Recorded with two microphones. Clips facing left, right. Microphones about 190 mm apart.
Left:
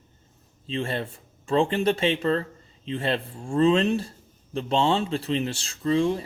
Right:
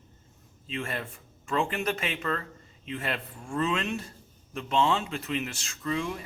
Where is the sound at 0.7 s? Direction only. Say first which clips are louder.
Left 6 dB; 30° left (ahead or behind).